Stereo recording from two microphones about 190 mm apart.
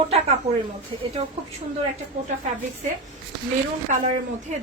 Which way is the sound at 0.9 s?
25° right (ahead or behind).